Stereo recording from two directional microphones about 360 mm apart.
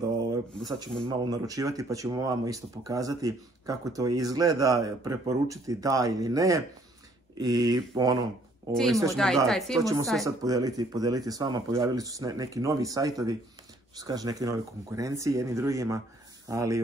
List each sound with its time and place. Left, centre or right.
1.0 s speech: centre
8.7 s speech: centre
10.4 s speech: centre